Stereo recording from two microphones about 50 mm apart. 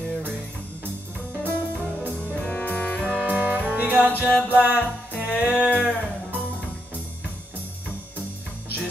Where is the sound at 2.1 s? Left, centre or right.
Left.